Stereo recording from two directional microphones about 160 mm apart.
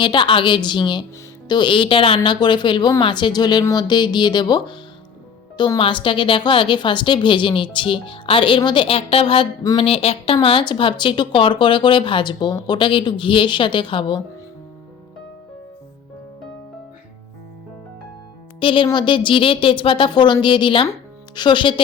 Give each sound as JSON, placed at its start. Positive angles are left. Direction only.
{"t": 0.0, "sound": "speech", "side_deg": 30}
{"t": 18.6, "sound": "speech", "side_deg": 30}